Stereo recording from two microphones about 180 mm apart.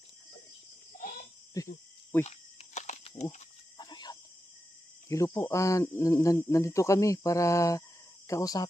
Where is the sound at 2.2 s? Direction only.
35° left (ahead or behind).